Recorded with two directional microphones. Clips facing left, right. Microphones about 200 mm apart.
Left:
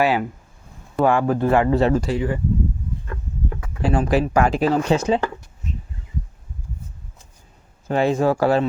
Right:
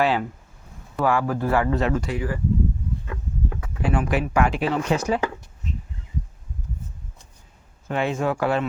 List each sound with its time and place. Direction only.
0.0 s speech: 10° left (ahead or behind)
0.9 s speech: 25° left (ahead or behind)
3.8 s speech: 30° left (ahead or behind)
7.9 s speech: 35° left (ahead or behind)